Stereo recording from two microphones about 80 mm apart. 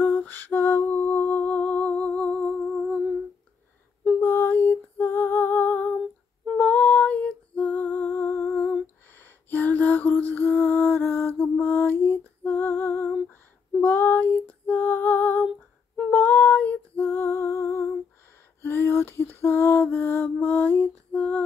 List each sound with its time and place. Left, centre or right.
0.0 s lullaby: left
4.2 s a sound: left
6.6 s music: centre
9.5 s lullaby: left
13.7 s female singing: left
16.1 s music: left
18.6 s lullaby: left